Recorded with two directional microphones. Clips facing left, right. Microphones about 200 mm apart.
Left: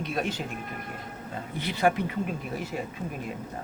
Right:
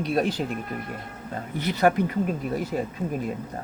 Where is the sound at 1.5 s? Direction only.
40° right (ahead or behind).